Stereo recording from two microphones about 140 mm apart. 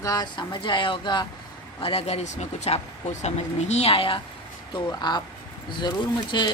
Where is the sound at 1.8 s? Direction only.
45° left (ahead or behind).